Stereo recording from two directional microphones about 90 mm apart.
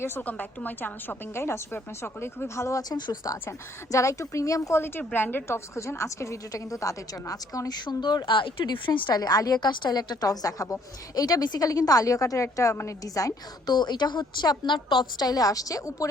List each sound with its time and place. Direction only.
0.0 s a woman's voice: 20° left (ahead or behind); by 4.8 s 35° left (ahead or behind)
4.8 s a woman's voice: 20° left (ahead or behind); by 16.0 s 40° left (ahead or behind)